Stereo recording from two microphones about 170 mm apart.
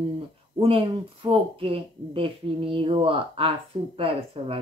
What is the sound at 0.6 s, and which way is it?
Speech, 35° right (ahead or behind).